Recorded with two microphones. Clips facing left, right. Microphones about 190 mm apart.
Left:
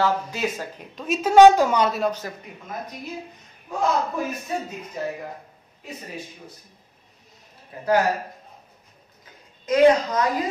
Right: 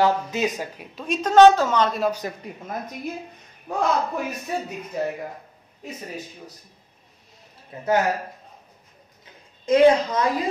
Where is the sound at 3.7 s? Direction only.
65° right (ahead or behind).